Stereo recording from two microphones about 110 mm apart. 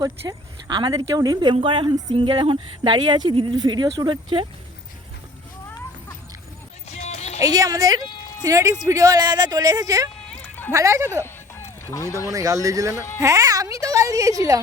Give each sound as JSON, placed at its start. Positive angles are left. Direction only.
{"t": 0.0, "sound": "speech", "side_deg": -40}
{"t": 6.8, "sound": "music", "side_deg": 75}
{"t": 7.4, "sound": "speech", "side_deg": -35}
{"t": 11.2, "sound": "a sound", "side_deg": 25}
{"t": 12.3, "sound": "speech", "side_deg": -30}